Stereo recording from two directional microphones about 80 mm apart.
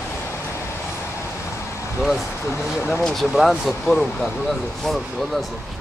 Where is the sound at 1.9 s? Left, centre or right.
Centre.